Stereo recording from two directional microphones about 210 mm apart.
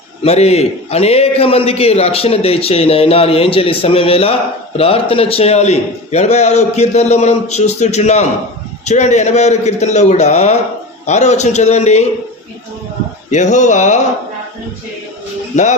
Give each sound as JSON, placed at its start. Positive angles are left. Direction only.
{"t": 0.2, "sound": "a man's voice", "side_deg": 30}
{"t": 13.3, "sound": "a man's voice", "side_deg": 35}